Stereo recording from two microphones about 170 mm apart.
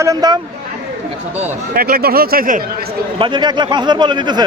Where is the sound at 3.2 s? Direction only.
25° right (ahead or behind).